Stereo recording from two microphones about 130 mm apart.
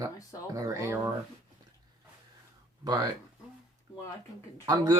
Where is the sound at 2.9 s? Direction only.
30° right (ahead or behind).